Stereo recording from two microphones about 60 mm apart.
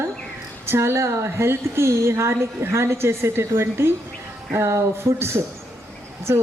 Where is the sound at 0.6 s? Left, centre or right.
Right.